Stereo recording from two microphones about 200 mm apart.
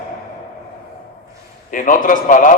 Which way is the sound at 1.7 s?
40° left (ahead or behind).